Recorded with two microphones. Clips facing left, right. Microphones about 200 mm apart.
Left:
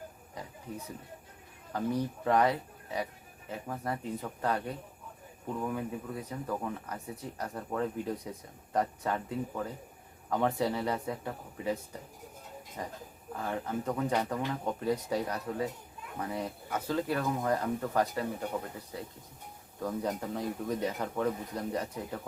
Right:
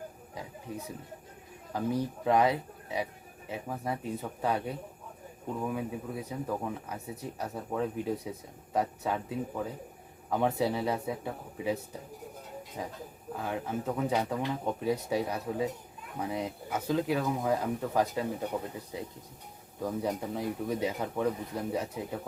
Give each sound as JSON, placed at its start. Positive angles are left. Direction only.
{"t": 1.7, "sound": "speech", "side_deg": -10}
{"t": 12.8, "sound": "speech", "side_deg": -10}